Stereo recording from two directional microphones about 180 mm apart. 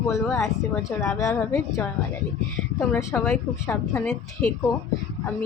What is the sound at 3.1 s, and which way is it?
Speech, 5° left (ahead or behind).